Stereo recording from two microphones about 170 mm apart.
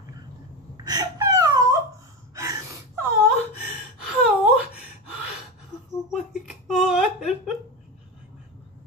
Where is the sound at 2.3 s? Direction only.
15° right (ahead or behind).